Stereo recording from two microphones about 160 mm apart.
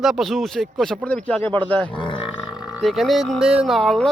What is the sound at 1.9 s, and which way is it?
Burping, 30° left (ahead or behind).